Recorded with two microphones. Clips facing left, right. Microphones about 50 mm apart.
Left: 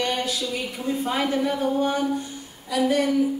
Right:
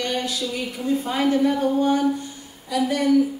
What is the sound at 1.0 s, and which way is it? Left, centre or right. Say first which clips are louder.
A woman's voice: right 3 dB; centre.